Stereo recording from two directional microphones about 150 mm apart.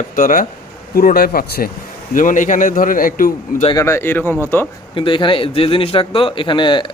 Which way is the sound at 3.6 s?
30° left (ahead or behind).